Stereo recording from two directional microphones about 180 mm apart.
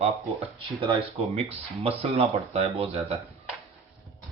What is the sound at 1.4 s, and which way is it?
Speech, 35° right (ahead or behind).